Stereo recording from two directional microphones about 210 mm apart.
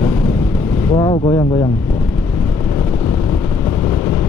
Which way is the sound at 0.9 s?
20° left (ahead or behind).